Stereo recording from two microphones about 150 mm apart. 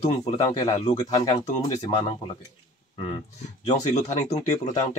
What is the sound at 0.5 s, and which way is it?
Speech, 35° left (ahead or behind).